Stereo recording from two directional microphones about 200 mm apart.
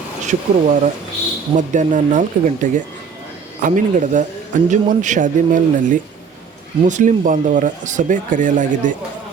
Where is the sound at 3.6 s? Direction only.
40° right (ahead or behind).